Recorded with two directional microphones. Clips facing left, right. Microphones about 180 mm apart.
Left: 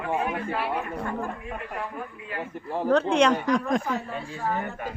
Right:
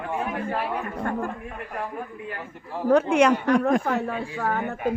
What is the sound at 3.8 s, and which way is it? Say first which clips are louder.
A woman's voice: right 4 dB; 60° right (ahead or behind).